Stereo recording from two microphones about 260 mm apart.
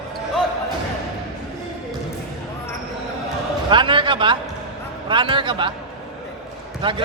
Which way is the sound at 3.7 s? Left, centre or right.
Centre.